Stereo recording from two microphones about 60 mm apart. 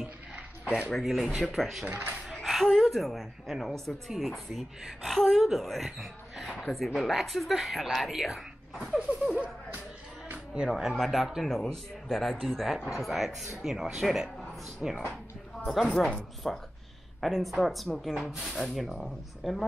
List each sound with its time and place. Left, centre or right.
0.9 s a woman's voice: centre
1.9 s speech: right
2.4 s a sound: centre
2.8 s a woman's voice: centre
9.2 s speech: centre
10.7 s a woman's voice: centre
15.9 s speech: centre
16.5 s a woman's voice: centre